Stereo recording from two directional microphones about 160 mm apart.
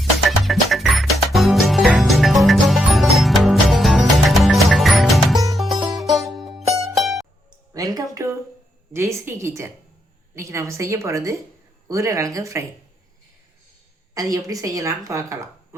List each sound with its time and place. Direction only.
0.3 s music: centre (ahead or behind)
7.7 s a sound: 20° right (ahead or behind)
8.9 s a woman's voice: 15° right (ahead or behind)
14.1 s a woman's voice: 20° right (ahead or behind)